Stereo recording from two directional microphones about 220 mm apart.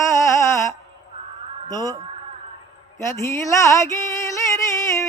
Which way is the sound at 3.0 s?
15° left (ahead or behind).